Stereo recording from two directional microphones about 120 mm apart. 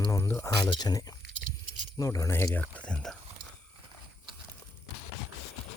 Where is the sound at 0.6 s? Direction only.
40° left (ahead or behind); by 3.1 s 10° left (ahead or behind).